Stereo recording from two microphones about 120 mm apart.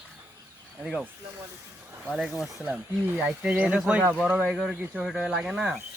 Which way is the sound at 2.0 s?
Centre (ahead or behind).